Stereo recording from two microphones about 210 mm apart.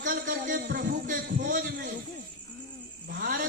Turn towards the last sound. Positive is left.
turn(degrees=-45)  # may be behind; listen again after turning